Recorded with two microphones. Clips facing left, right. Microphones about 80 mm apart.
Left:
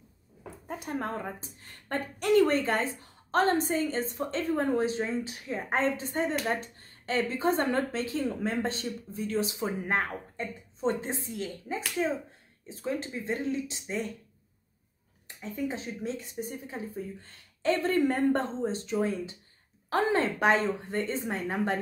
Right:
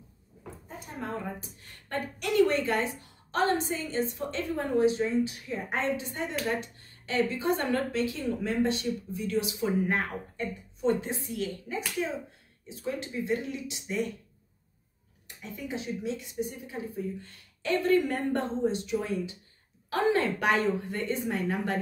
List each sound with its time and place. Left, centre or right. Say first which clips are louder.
0.8 s a woman's voice: left 2 dB; left
1.4 s a woman's voice: even; left
15.2 s a woman's voice: left 5 dB; left